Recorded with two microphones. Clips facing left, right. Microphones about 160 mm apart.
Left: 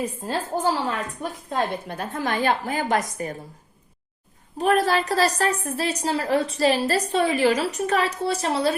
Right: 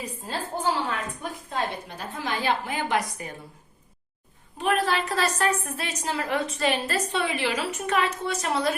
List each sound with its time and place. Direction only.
0.0 s a woman's voice: 45° left (ahead or behind)
4.5 s a woman's voice: 40° left (ahead or behind)